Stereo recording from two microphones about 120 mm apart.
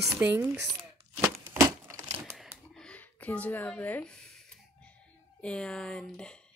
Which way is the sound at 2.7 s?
10° left (ahead or behind).